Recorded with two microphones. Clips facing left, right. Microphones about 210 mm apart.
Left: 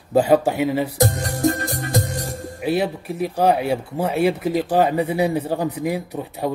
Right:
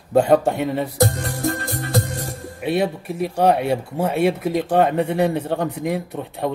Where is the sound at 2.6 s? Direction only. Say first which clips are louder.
Even; centre (ahead or behind).